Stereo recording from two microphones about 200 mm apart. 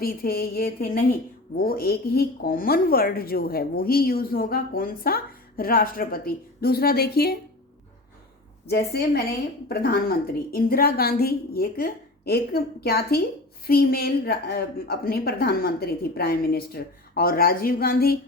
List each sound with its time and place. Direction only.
0.0 s speech: 50° left (ahead or behind)
8.6 s speech: 55° left (ahead or behind)